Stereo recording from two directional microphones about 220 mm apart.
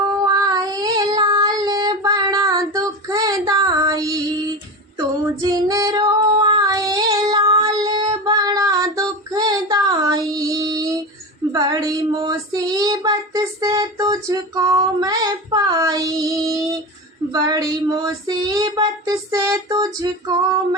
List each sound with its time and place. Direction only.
0.3 s child singing: 15° right (ahead or behind)
4.9 s female singing: 15° right (ahead or behind)
11.5 s child singing: 20° right (ahead or behind)